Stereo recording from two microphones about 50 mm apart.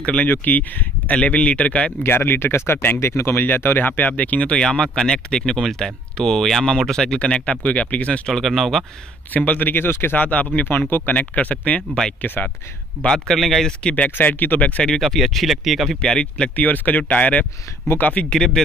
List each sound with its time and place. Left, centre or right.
0.0 s speech: left
0.3 s speech: left
2.0 s speech: left
8.3 s speech: centre
9.3 s speech: left
10.1 s speech: left
13.4 s speech: centre
13.7 s speech: left
14.1 s speech: left
14.6 s speech: centre
15.0 s speech: centre
16.0 s speech: centre
16.5 s speech: left
18.3 s speech: centre